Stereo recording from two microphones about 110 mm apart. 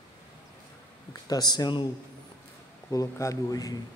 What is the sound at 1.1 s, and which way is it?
Speech, 35° left (ahead or behind).